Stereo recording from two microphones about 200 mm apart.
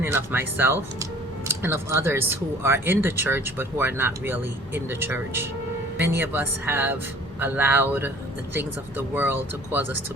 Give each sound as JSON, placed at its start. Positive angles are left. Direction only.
{"t": 0.0, "sound": "speech", "side_deg": -10}